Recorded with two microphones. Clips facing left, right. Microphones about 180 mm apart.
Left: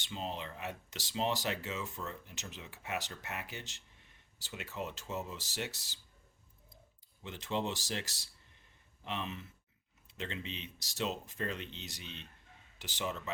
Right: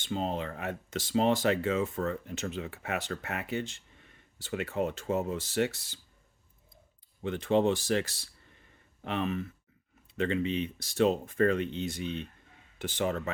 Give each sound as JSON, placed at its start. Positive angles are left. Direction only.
{"t": 0.0, "sound": "speech", "side_deg": -50}
{"t": 7.2, "sound": "speech", "side_deg": -55}